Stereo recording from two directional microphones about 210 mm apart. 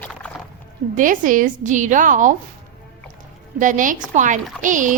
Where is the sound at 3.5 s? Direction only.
40° right (ahead or behind).